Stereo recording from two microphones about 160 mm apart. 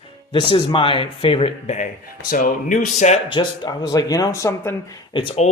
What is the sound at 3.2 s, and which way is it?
Speech, 30° left (ahead or behind).